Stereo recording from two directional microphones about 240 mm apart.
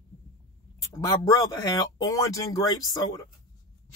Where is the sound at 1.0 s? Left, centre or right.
Centre.